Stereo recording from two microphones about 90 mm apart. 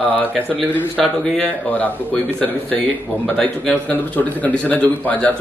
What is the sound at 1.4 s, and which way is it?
A man's voice, 20° left (ahead or behind).